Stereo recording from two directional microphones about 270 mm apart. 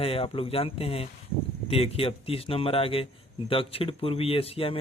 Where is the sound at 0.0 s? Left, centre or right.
Left.